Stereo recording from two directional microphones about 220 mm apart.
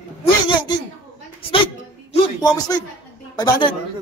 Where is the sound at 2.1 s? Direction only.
15° left (ahead or behind).